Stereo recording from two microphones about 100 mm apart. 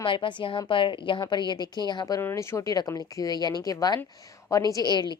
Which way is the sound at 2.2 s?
25° left (ahead or behind).